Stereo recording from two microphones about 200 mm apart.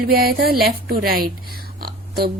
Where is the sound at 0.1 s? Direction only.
50° right (ahead or behind).